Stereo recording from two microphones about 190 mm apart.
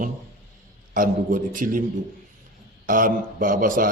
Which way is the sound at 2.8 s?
45° right (ahead or behind).